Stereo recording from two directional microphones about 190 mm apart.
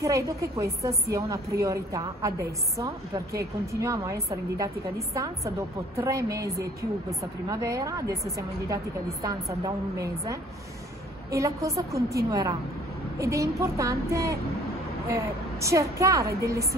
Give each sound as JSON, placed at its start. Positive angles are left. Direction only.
{"t": 0.0, "sound": "a woman's voice", "side_deg": -15}